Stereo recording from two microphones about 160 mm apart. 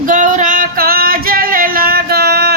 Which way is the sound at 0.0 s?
55° right (ahead or behind).